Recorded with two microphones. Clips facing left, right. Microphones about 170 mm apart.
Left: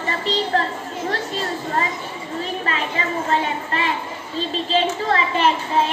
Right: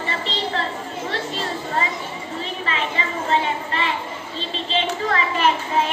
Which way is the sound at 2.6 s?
45° left (ahead or behind).